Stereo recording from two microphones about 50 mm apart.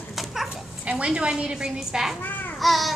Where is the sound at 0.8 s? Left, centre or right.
Right; by 2.1 s centre.